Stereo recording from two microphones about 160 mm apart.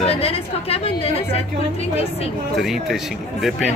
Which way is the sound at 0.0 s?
40° left (ahead or behind).